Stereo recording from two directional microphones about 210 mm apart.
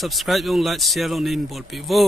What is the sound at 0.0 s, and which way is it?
Speech, centre (ahead or behind).